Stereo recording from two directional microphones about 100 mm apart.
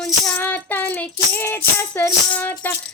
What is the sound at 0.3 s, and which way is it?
Music, 20° left (ahead or behind).